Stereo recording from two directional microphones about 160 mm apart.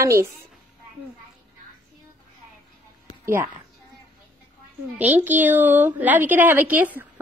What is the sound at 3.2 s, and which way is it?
Speech, 10° right (ahead or behind).